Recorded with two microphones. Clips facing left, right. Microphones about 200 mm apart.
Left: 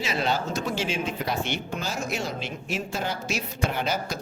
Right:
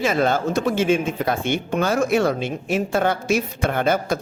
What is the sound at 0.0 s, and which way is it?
Speech, 50° right (ahead or behind).